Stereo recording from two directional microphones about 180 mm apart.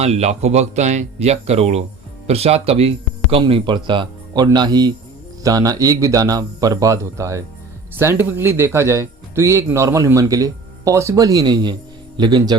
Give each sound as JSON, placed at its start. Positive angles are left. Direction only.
{"t": 0.0, "sound": "speech", "side_deg": -35}